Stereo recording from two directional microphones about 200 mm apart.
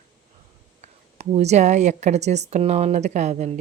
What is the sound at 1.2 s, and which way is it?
Speech, 35° right (ahead or behind).